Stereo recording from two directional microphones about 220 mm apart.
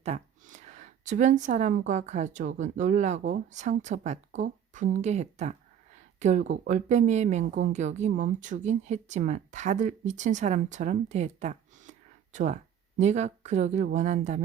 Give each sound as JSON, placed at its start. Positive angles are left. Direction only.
{"t": 0.0, "sound": "speech", "side_deg": -30}